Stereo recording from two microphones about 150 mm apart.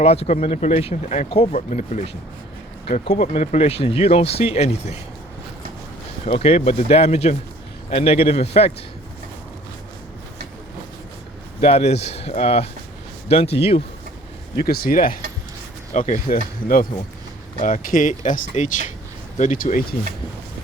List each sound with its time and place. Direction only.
0.0 s speech: 45° left (ahead or behind)
6.2 s speech: 40° left (ahead or behind)
11.6 s speech: 45° left (ahead or behind)
14.5 s speech: 90° left; by 15.2 s 75° left (ahead or behind)
15.9 s speech: 60° left (ahead or behind)
17.6 s speech: 60° left (ahead or behind)